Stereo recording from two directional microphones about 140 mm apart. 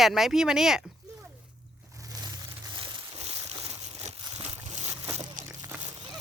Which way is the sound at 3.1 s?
50° right (ahead or behind).